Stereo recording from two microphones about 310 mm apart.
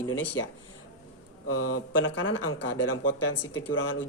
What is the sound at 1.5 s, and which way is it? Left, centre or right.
Speech, left.